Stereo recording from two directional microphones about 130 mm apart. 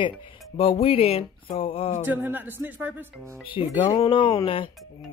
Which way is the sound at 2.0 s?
15° right (ahead or behind).